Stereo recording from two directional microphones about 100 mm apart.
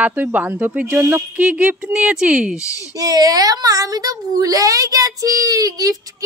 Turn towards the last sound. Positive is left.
turn(degrees=-35)  # may be behind; listen again after turning